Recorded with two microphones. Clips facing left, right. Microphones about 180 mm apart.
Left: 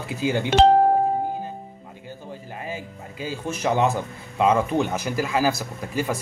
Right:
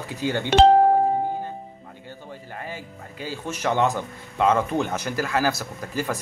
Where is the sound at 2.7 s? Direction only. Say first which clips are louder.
Left 3 dB; 15° left (ahead or behind).